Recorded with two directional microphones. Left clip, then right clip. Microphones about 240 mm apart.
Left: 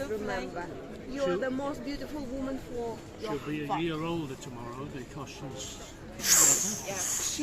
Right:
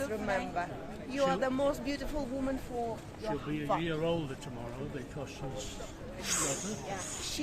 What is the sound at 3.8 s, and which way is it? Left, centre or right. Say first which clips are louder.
Speech: even; centre.